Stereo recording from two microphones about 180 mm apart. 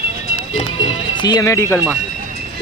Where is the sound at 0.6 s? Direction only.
25° left (ahead or behind).